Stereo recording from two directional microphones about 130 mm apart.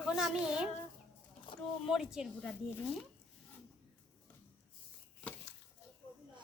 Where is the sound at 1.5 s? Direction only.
40° left (ahead or behind).